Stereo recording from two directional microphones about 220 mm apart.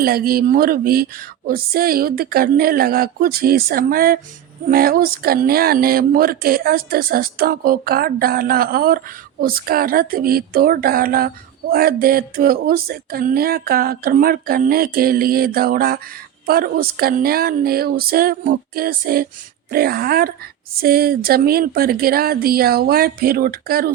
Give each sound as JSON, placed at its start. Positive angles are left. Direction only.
{"t": 0.0, "sound": "speech", "side_deg": -40}
{"t": 11.7, "sound": "a sound", "side_deg": -40}
{"t": 16.5, "sound": "speech", "side_deg": -45}